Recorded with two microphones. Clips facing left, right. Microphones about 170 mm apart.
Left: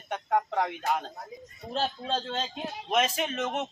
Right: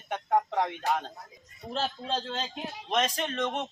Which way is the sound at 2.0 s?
15° left (ahead or behind).